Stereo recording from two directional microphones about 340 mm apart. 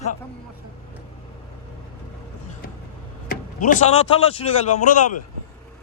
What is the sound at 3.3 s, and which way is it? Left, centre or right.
Speech, left.